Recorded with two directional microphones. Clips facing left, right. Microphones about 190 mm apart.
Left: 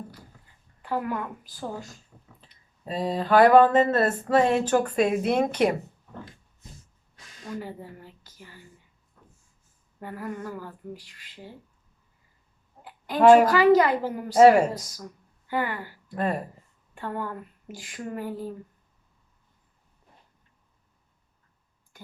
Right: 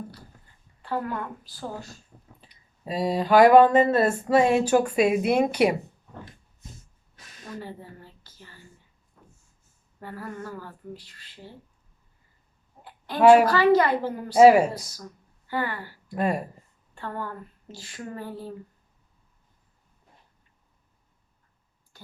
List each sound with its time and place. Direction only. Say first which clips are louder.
0.8 s a woman's voice: left 1 dB; 15° left (ahead or behind)
2.5 s a sound: right 1 dB; 10° right (ahead or behind)
7.6 s a woman's voice: left 1 dB; 15° left (ahead or behind)
10.0 s a woman's voice: left 2 dB; 20° left (ahead or behind)
13.1 s a child's voice: even; centre (ahead or behind)
13.5 s a woman's voice: left 1 dB; 20° left (ahead or behind)
14.3 s a sound: right 1 dB; 10° right (ahead or behind)
15.4 s a woman's voice: left 1 dB; 20° left (ahead or behind)
16.0 s speech: right 2 dB; 10° right (ahead or behind)
16.9 s a woman's voice: left 2 dB; 15° left (ahead or behind)